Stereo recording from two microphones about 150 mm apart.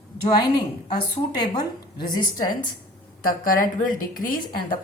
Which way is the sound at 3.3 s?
70° left (ahead or behind).